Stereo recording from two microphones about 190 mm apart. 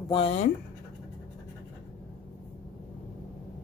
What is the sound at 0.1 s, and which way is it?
Speech, 30° left (ahead or behind).